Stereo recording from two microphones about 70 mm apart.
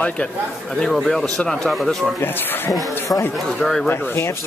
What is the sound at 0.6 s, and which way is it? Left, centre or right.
Speech, centre.